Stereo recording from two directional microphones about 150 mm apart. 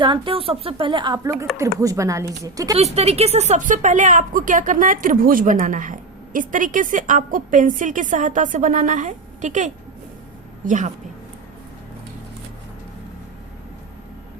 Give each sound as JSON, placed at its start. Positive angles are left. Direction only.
{"t": 0.0, "sound": "a woman's voice", "side_deg": -35}
{"t": 2.7, "sound": "a woman's voice", "side_deg": -45}